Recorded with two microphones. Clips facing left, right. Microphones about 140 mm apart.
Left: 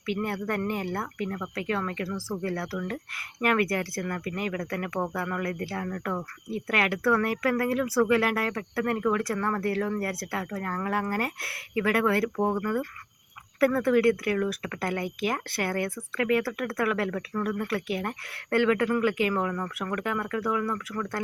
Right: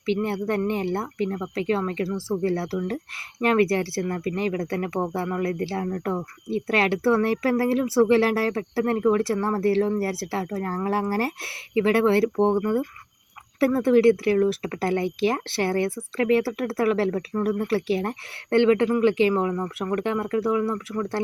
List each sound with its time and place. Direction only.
0.0 s speech: 25° right (ahead or behind)